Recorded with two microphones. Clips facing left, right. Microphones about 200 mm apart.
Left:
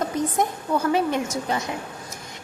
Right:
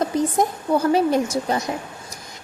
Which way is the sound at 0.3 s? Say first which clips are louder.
Right 3 dB; 35° right (ahead or behind).